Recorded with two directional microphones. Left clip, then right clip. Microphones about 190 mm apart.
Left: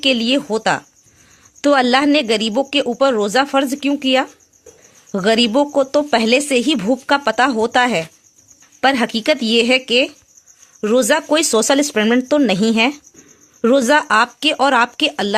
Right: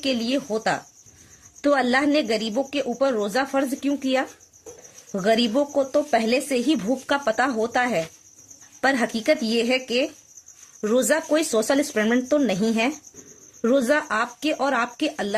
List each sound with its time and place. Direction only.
0.0 s a woman's voice: 35° left (ahead or behind)